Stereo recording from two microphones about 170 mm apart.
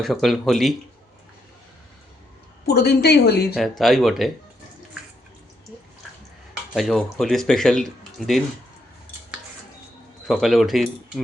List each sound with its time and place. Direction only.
0.0 s speech: centre (ahead or behind)
2.6 s a woman's voice: 70° left (ahead or behind)
3.5 s speech: centre (ahead or behind)
6.7 s speech: centre (ahead or behind)
10.2 s speech: centre (ahead or behind)